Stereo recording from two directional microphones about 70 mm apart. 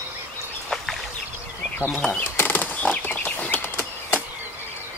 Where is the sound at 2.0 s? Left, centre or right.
Centre.